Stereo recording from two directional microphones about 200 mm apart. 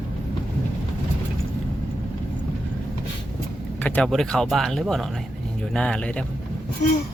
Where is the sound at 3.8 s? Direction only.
5° left (ahead or behind).